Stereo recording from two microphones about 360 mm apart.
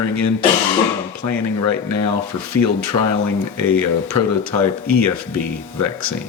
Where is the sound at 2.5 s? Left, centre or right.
Right.